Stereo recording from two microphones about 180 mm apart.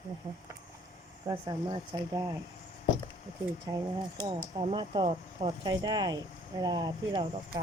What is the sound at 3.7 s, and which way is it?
Speech, 20° right (ahead or behind).